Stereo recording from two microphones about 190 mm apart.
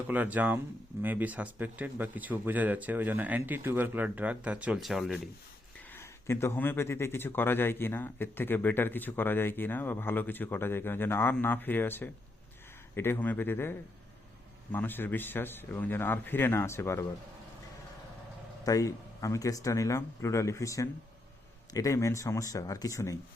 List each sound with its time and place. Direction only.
0.1 s speech: 10° right (ahead or behind)
5.9 s speech: 15° left (ahead or behind)
18.6 s speech: 15° left (ahead or behind)